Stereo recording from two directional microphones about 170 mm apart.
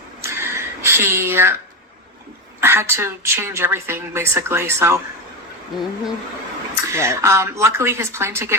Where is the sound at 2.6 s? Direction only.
15° right (ahead or behind).